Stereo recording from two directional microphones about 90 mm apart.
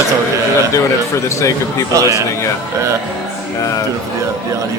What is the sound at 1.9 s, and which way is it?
Speech, 40° right (ahead or behind).